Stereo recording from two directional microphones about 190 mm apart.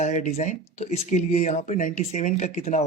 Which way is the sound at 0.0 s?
35° left (ahead or behind).